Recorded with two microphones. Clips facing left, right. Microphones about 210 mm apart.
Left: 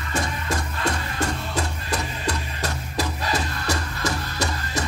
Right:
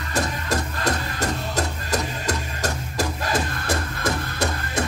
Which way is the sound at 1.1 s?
45° right (ahead or behind).